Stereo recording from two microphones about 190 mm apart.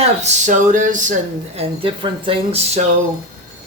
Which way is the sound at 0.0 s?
35° right (ahead or behind).